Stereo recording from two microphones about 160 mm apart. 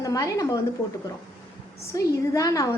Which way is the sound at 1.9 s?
20° left (ahead or behind).